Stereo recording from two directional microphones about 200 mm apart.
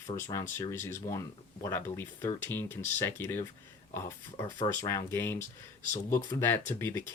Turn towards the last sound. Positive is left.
turn(degrees=10)  # may be behind; listen again after turning